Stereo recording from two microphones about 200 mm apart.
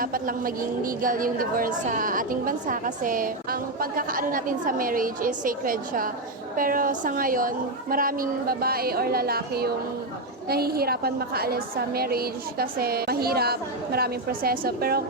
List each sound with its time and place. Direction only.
0.0 s a woman's voice: 45° right (ahead or behind)